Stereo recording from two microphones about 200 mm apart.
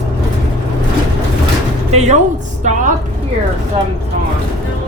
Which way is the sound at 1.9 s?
35° right (ahead or behind).